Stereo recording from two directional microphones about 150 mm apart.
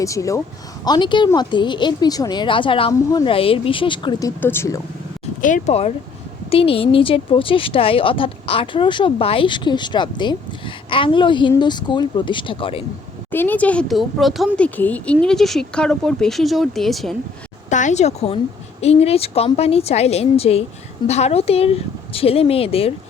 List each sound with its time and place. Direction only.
0.0 s speech: 20° left (ahead or behind)
4.4 s speech: 15° left (ahead or behind)
5.4 s a woman's voice: 55° left (ahead or behind); by 12.8 s 35° left (ahead or behind)
13.3 s speech: 15° left (ahead or behind)
17.7 s a woman's voice: 55° left (ahead or behind)